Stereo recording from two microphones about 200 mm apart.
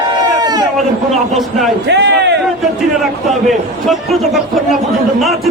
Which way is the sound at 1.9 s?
60° right (ahead or behind).